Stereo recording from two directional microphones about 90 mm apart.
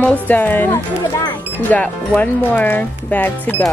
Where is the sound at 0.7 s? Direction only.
40° left (ahead or behind).